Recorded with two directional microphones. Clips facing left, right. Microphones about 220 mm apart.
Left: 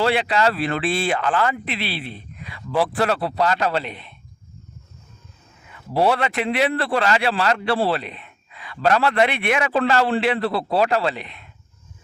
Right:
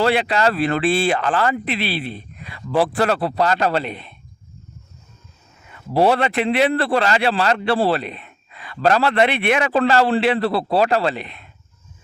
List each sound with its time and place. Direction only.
0.0 s a man's voice: 40° right (ahead or behind)
5.9 s a man's voice: 40° right (ahead or behind)
7.8 s a man's voice: 40° right (ahead or behind)